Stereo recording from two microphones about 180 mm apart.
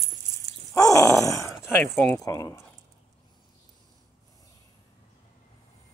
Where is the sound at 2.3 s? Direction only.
20° left (ahead or behind).